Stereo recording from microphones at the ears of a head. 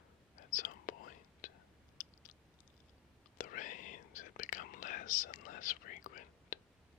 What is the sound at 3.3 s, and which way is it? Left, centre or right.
Whispering, left.